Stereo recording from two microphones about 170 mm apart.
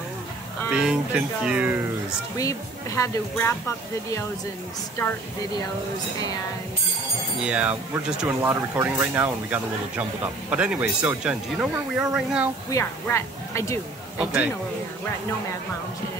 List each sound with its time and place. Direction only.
0.7 s speech: 5° right (ahead or behind)
3.0 s speech: 15° left (ahead or behind)
7.4 s speech: 5° right (ahead or behind)
12.7 s speech: 15° left (ahead or behind)
14.2 s speech: 10° right (ahead or behind)